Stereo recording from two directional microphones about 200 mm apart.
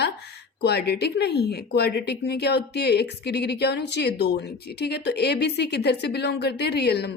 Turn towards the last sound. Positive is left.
turn(degrees=55)  # may be behind; listen again after turning